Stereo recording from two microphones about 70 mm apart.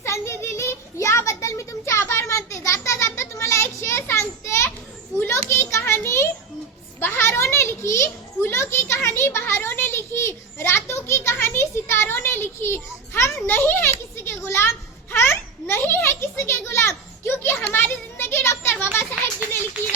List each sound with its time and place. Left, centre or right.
0.0 s child singing: left
5.2 s children playing: left
7.0 s a sound: left
9.0 s children playing: left